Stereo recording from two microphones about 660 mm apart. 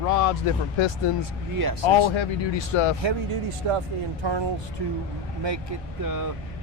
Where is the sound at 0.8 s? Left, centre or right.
Left.